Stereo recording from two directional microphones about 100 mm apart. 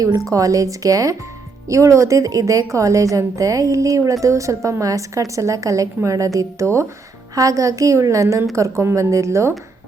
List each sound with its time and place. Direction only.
0.3 s a woman's voice: 35° right (ahead or behind)